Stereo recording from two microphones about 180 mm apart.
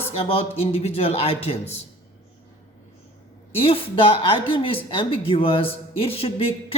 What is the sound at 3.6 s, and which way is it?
Speech, 30° left (ahead or behind).